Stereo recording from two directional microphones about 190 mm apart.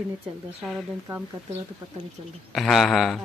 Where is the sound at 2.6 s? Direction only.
Centre (ahead or behind).